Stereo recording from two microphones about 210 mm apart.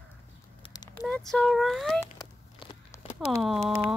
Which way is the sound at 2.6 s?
25° left (ahead or behind).